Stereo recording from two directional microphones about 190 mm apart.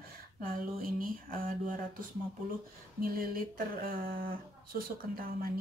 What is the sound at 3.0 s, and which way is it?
Speech, 50° right (ahead or behind).